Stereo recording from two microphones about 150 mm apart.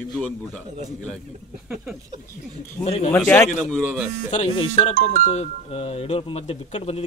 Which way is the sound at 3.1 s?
15° left (ahead or behind).